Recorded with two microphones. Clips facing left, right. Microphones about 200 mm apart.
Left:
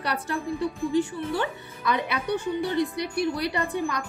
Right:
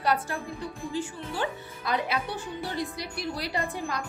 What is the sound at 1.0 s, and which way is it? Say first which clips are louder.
A woman's voice: left 2 dB; 60° left (ahead or behind).